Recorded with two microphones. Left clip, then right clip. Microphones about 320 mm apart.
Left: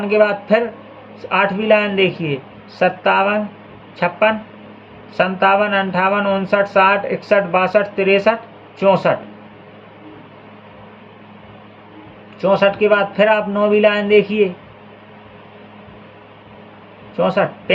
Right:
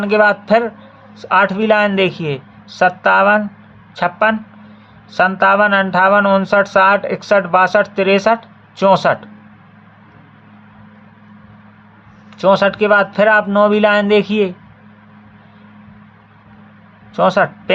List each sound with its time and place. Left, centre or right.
0.0 s speech: right
12.4 s speech: right
14.3 s speech: right
17.2 s speech: right